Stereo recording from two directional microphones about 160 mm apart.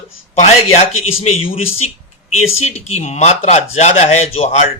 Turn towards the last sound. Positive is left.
turn(degrees=45)  # may be behind; listen again after turning